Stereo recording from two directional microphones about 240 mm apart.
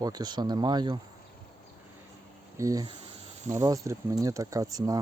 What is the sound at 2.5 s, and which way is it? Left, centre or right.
Speech, centre.